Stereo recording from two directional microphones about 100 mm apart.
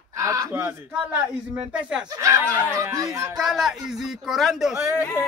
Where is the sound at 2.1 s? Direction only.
30° right (ahead or behind).